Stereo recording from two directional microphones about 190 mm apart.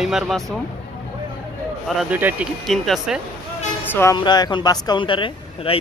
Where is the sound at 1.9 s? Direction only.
5° right (ahead or behind).